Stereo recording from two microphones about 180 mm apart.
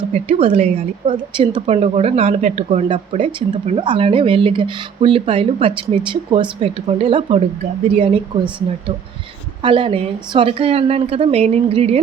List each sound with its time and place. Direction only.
0.1 s speech: 30° right (ahead or behind)
9.6 s speech: 30° right (ahead or behind)